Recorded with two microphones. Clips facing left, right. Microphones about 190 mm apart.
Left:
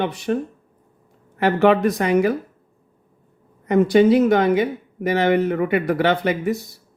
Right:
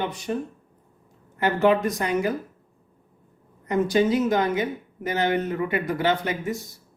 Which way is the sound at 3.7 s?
65° left (ahead or behind).